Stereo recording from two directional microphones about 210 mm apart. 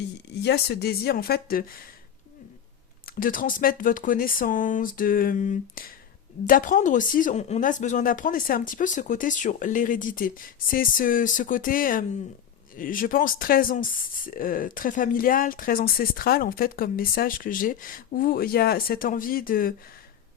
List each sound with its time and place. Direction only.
0.4 s a woman's voice: 50° left (ahead or behind)
3.1 s speech: 40° left (ahead or behind)